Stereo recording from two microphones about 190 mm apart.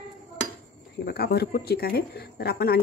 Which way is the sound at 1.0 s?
55° left (ahead or behind).